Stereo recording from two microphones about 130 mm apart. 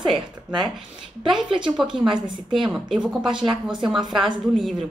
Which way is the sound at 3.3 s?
40° right (ahead or behind).